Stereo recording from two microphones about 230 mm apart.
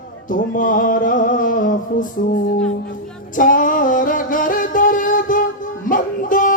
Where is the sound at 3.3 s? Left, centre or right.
Left.